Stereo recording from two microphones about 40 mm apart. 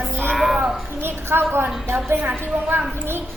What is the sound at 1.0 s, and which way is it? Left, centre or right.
Speech, right.